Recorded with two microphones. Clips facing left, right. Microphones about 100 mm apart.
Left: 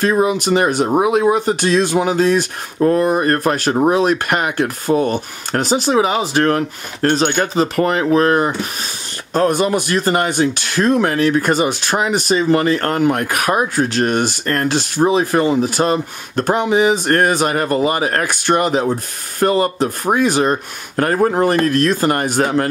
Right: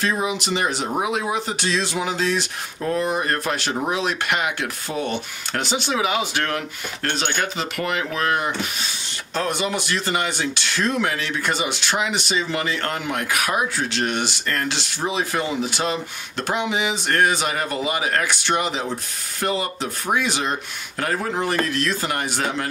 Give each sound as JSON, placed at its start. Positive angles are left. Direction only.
{"t": 0.0, "sound": "speech", "side_deg": 50}